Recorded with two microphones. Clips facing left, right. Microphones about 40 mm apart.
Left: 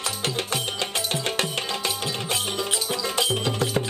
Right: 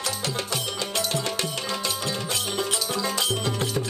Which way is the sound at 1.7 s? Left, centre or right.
Left.